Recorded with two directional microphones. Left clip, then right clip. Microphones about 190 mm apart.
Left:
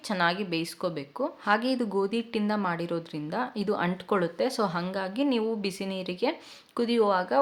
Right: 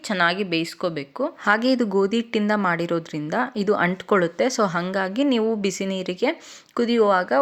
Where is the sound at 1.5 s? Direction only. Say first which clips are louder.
Right 7 dB; 35° right (ahead or behind).